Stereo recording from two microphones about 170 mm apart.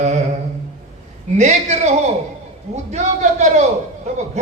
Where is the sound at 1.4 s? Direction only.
40° right (ahead or behind).